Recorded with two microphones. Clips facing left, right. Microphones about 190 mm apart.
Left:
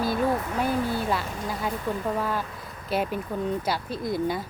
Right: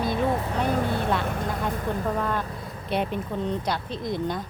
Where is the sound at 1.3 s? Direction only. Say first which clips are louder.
Right 3 dB; 55° right (ahead or behind).